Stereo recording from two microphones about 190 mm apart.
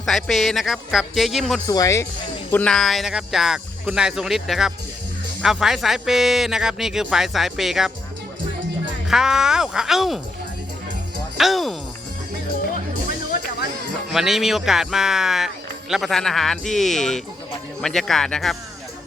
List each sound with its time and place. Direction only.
0.0 s speech: centre (ahead or behind)
1.6 s speech: 15° left (ahead or behind); by 7.9 s centre (ahead or behind)
9.0 s speech: 5° right (ahead or behind)
11.3 s speech: centre (ahead or behind)
14.1 s speech: centre (ahead or behind)